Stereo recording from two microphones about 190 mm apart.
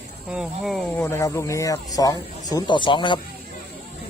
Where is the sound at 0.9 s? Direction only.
10° left (ahead or behind).